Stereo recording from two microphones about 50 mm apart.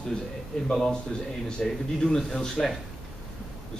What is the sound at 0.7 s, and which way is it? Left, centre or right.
Speech, centre.